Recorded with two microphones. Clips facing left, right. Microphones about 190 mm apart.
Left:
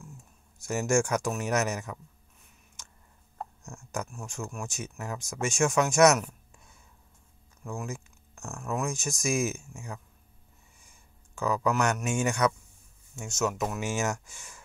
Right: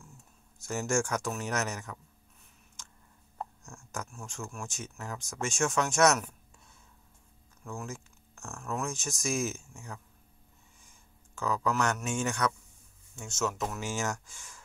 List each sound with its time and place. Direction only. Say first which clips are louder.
0.7 s speech: left 4 dB; 15° left (ahead or behind)
3.6 s a sound: left 5 dB; 20° left (ahead or behind)
4.1 s speech: left 4 dB; 15° left (ahead or behind)
7.6 s speech: left 3 dB; 15° left (ahead or behind)
11.3 s speech: left 3 dB; 15° left (ahead or behind)